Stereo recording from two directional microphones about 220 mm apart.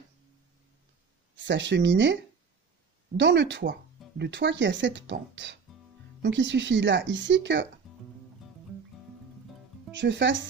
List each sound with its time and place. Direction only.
1.3 s speech: 55° right (ahead or behind)
3.2 s speech: 55° right (ahead or behind)
9.9 s speech: 55° right (ahead or behind)